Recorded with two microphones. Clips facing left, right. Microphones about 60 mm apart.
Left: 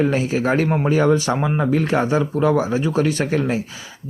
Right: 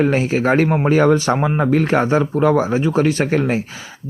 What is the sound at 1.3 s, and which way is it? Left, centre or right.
Speech, right.